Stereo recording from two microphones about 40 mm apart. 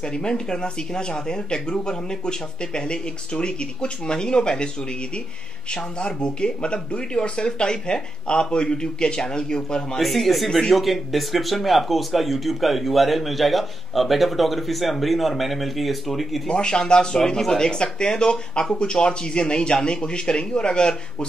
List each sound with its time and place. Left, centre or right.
0.0 s speech: centre
5.9 s speech: left
9.9 s speech: centre
16.4 s speech: centre